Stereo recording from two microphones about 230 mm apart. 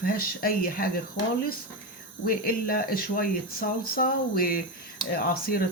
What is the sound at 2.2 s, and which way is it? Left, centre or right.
Speech, left.